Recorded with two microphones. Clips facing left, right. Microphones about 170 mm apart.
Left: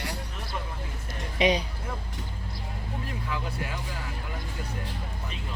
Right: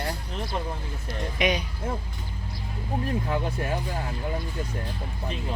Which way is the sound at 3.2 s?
40° right (ahead or behind).